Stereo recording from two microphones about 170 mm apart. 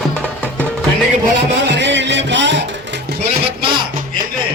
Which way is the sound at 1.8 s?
90° right.